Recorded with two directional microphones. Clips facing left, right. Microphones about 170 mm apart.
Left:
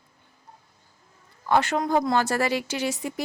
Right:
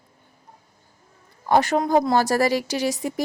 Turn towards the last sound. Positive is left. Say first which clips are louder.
# right 4 dB
turn(degrees=-40)  # may be behind; listen again after turning